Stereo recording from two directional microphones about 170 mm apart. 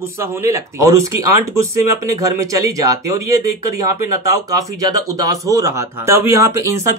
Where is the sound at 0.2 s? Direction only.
15° right (ahead or behind).